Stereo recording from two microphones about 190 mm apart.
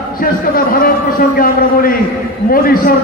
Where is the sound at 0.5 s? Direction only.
50° left (ahead or behind).